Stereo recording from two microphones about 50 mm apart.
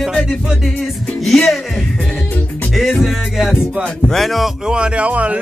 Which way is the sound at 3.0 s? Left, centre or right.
Centre.